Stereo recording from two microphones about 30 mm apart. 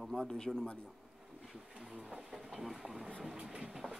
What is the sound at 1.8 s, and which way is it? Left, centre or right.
Speech, right.